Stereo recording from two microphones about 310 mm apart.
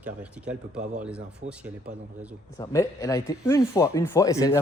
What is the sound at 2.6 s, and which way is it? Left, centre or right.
A man's voice, centre.